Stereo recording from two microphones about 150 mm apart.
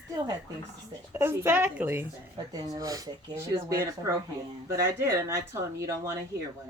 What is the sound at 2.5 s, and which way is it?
Speech, 25° right (ahead or behind).